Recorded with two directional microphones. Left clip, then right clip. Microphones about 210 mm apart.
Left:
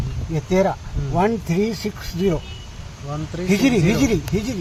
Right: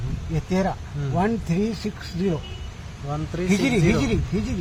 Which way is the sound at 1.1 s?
40° left (ahead or behind).